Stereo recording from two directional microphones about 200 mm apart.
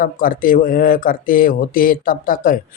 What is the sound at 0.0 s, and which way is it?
Speech, 45° left (ahead or behind).